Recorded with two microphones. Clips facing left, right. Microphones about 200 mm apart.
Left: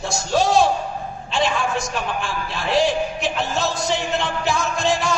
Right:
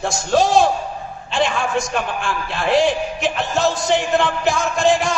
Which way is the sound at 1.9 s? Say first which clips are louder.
Right 3 dB; 55° right (ahead or behind).